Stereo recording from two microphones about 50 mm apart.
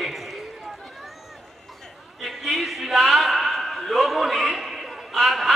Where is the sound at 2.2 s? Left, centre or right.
Centre.